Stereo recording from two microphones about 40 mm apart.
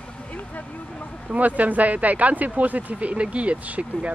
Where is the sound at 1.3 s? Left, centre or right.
Right.